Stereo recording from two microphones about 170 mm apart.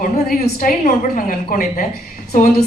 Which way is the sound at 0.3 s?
65° left (ahead or behind).